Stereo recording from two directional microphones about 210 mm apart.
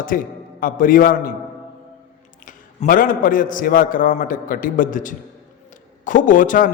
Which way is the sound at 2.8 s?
40° left (ahead or behind).